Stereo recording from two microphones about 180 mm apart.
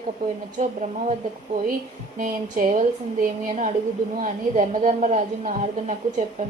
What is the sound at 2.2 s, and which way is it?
A woman's voice, 50° right (ahead or behind).